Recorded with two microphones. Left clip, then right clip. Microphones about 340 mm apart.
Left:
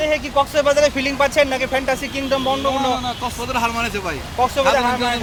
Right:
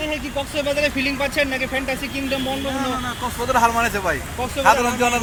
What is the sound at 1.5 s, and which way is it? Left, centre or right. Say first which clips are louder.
Speech: left 4 dB; left.